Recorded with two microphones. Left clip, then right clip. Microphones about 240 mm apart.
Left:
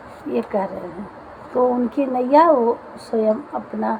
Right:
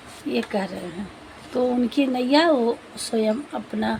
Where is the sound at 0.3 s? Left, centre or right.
Right.